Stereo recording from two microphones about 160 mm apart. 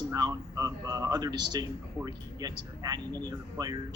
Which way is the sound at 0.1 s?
20° right (ahead or behind).